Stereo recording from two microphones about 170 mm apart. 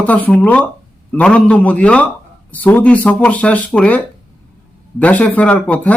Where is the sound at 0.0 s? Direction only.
10° left (ahead or behind).